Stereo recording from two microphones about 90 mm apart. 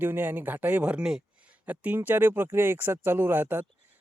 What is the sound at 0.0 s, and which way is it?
Speech, 20° right (ahead or behind).